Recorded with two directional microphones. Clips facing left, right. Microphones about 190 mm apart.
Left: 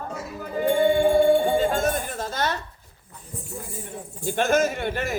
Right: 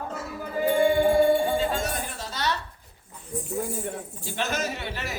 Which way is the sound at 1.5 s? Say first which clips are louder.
Left 4 dB; 50° left (ahead or behind).